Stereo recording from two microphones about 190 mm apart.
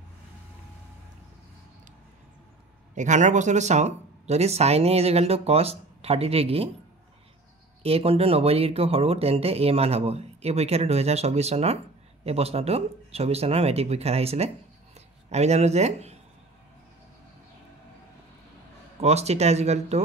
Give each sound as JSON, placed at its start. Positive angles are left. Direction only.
{"t": 2.9, "sound": "speech", "side_deg": -40}
{"t": 7.8, "sound": "speech", "side_deg": -30}
{"t": 18.9, "sound": "speech", "side_deg": -35}